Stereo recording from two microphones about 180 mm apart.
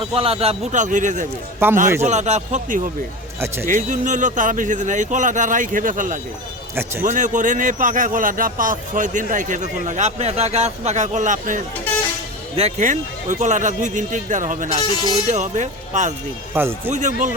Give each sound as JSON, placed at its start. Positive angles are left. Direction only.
{"t": 0.0, "sound": "a man's voice", "side_deg": -30}
{"t": 1.5, "sound": "speech", "side_deg": -15}
{"t": 2.0, "sound": "a man's voice", "side_deg": -40}
{"t": 16.6, "sound": "speech", "side_deg": -10}
{"t": 16.9, "sound": "speech", "side_deg": -45}